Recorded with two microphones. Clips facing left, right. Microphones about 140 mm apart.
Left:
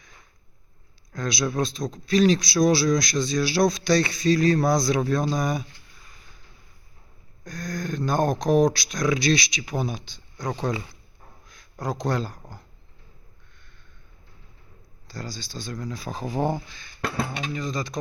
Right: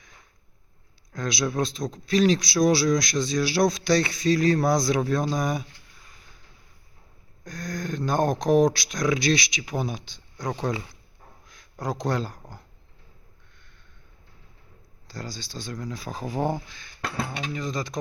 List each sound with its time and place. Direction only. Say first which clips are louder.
1.1 s a man's voice: left 1 dB; 15° right (ahead or behind)
7.4 s a man's voice: left 1 dB; 15° right (ahead or behind)
11.4 s a sound: even; 15° right (ahead or behind)
12.0 s a man's voice: left 1 dB; 15° right (ahead or behind)
15.0 s a man's voice: left 1 dB; 15° right (ahead or behind)